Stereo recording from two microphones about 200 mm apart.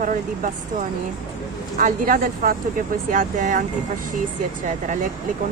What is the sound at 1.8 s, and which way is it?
Speech, 40° right (ahead or behind).